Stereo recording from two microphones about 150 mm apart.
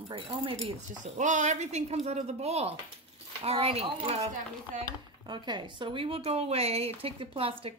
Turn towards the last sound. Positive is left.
turn(degrees=-40)  # may be behind; listen again after turning